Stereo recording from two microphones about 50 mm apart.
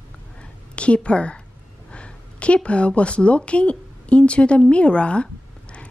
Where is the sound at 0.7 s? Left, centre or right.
Left.